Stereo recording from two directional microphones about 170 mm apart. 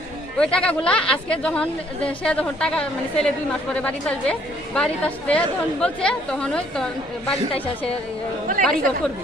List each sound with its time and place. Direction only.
0.3 s a woman's voice: 5° left (ahead or behind)
8.4 s speech: 55° right (ahead or behind)